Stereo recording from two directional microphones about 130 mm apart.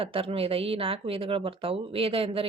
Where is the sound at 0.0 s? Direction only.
45° right (ahead or behind).